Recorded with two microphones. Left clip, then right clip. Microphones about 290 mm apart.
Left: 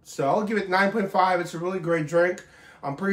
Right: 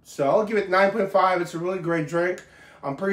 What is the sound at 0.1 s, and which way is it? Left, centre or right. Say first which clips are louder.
Speech: right 3 dB; centre.